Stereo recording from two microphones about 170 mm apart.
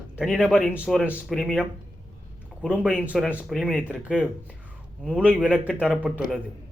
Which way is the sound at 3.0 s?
10° right (ahead or behind).